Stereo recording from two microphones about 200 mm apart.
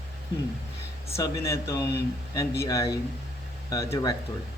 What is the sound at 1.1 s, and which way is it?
A man's voice, 15° left (ahead or behind).